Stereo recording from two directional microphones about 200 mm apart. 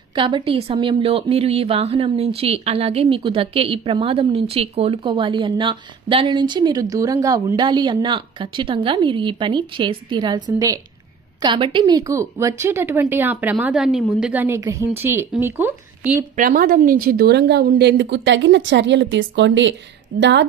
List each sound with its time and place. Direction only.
0.1 s a woman's voice: 25° right (ahead or behind)
16.3 s a woman's voice: 45° right (ahead or behind); by 20.4 s 60° right (ahead or behind)